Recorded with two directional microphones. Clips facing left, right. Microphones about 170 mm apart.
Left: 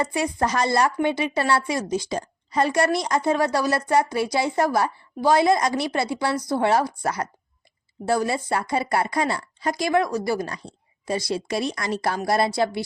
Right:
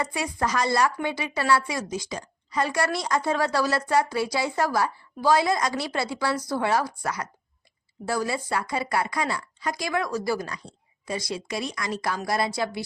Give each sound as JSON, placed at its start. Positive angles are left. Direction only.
{"t": 0.0, "sound": "speech", "side_deg": 25}